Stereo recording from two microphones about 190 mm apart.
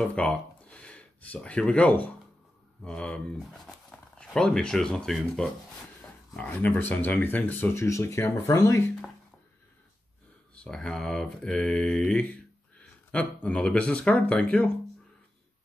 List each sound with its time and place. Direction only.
0.0 s speech: 5° left (ahead or behind)
10.5 s speech: 5° left (ahead or behind)